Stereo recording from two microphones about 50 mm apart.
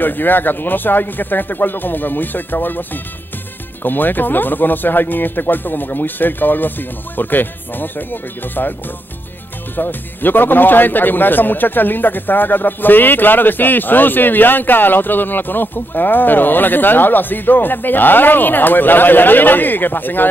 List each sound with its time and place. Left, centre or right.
0.0 s speech: left
9.8 s speech: left